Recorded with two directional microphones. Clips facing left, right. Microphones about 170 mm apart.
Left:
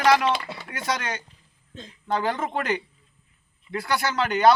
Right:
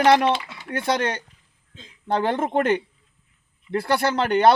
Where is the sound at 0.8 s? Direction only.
55° right (ahead or behind).